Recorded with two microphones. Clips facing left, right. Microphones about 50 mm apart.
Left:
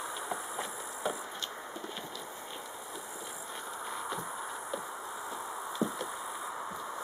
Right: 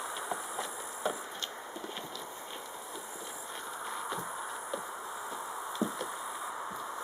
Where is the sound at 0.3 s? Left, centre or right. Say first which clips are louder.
Even; centre.